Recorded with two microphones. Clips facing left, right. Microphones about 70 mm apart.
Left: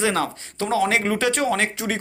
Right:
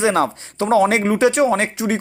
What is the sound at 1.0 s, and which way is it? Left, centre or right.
Speech, centre.